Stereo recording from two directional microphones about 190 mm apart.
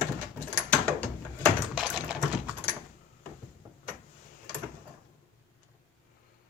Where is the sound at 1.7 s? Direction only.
5° right (ahead or behind).